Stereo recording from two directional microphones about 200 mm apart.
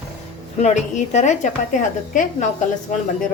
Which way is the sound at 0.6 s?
35° left (ahead or behind).